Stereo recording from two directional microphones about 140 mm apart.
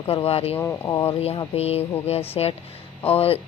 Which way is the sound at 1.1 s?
45° left (ahead or behind).